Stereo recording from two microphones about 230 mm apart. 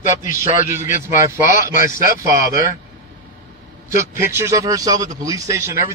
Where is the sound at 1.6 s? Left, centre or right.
Left.